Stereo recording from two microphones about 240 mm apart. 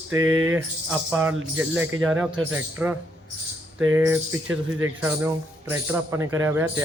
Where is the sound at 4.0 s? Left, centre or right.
Centre.